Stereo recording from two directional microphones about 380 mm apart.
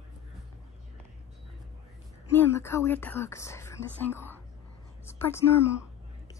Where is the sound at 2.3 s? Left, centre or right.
Centre.